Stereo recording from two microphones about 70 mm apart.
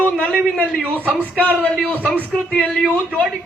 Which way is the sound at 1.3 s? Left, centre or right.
Left.